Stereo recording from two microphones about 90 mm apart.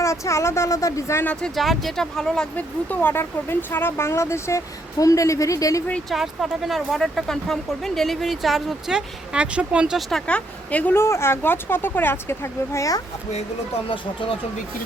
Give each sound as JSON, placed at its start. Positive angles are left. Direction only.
{"t": 0.0, "sound": "speech", "side_deg": 35}
{"t": 1.2, "sound": "speech", "side_deg": 10}
{"t": 2.6, "sound": "speech", "side_deg": 20}
{"t": 6.1, "sound": "speech", "side_deg": 0}
{"t": 10.1, "sound": "a woman's voice", "side_deg": 10}
{"t": 10.9, "sound": "speech", "side_deg": 30}